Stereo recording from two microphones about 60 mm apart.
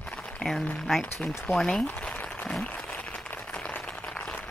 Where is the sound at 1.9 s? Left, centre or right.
Left.